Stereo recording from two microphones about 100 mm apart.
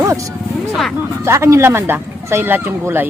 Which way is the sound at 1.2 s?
30° right (ahead or behind).